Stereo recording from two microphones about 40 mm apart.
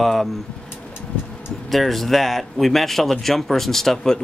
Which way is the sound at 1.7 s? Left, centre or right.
Centre.